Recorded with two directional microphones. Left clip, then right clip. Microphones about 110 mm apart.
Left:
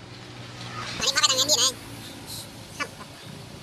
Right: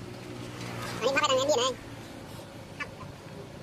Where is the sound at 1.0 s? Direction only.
40° right (ahead or behind).